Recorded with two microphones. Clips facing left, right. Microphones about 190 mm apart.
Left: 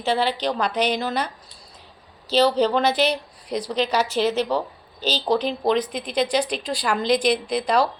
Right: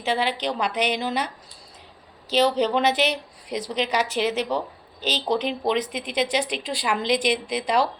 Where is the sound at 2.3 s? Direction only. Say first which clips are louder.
Left 2 dB; 35° left (ahead or behind).